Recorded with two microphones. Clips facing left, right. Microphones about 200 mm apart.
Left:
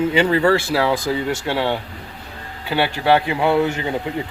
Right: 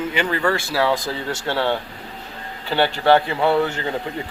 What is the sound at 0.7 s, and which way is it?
Speech, 15° left (ahead or behind).